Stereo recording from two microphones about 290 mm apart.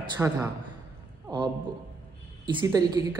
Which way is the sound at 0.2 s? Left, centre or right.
Centre.